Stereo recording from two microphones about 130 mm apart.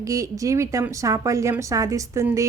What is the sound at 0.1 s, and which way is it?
Speech, 25° right (ahead or behind).